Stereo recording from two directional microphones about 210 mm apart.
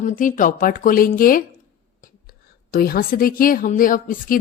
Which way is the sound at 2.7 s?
45° left (ahead or behind).